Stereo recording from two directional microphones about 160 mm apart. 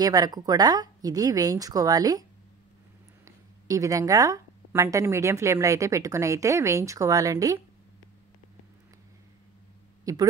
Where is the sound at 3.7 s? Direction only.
20° right (ahead or behind).